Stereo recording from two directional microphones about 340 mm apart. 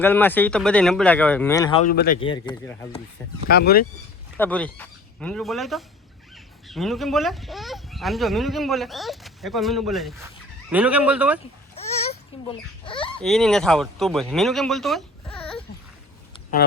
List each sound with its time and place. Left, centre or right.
0.0 s speech: centre; by 2.1 s left
2.2 s speech: centre
3.5 s speech: left
4.4 s speech: centre
11.8 s a sound: centre
13.1 s speech: centre